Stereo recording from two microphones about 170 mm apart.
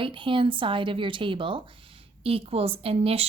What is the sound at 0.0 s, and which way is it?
Speech, 30° right (ahead or behind).